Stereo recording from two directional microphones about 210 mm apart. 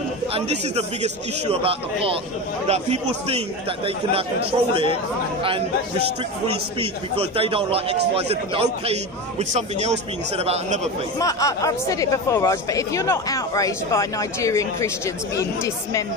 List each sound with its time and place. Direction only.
0.3 s a man's voice: 30° right (ahead or behind)
6.4 s a man's voice: 25° right (ahead or behind)
11.1 s speech: 15° left (ahead or behind)